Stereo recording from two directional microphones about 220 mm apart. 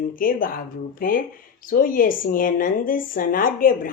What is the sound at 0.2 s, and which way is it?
Speech, 40° left (ahead or behind).